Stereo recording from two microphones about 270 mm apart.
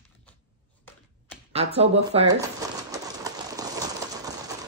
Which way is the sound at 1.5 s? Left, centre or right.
Right.